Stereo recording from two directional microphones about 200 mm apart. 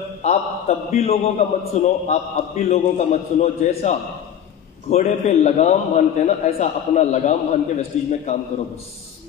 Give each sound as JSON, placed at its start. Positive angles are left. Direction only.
{"t": 0.2, "sound": "a man's voice", "side_deg": 35}